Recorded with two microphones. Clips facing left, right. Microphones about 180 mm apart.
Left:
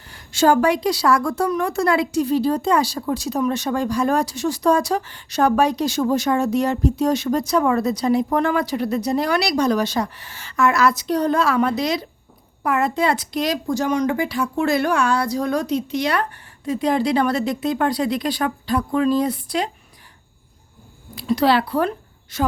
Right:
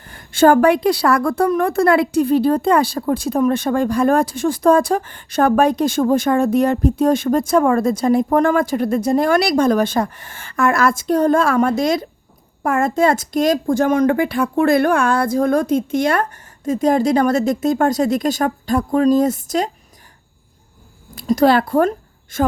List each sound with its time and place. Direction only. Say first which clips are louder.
0.0 s a woman's voice: right 5 dB; 50° right (ahead or behind)
21.2 s a woman's voice: right 4 dB; 45° right (ahead or behind)